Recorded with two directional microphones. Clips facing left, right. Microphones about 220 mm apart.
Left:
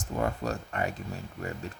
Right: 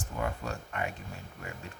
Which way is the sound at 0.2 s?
40° left (ahead or behind).